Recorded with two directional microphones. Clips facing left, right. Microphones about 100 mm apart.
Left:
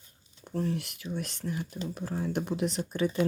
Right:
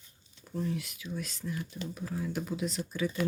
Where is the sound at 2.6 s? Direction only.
55° left (ahead or behind).